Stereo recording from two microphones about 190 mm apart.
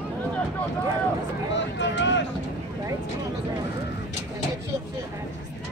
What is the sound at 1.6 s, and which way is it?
Speech, 70° left (ahead or behind).